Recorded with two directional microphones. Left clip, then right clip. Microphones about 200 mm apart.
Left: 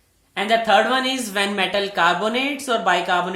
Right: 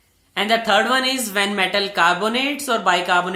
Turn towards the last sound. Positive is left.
turn(degrees=0)  # may be behind; listen again after turning